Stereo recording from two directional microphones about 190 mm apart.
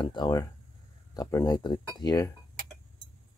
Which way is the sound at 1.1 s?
20° left (ahead or behind).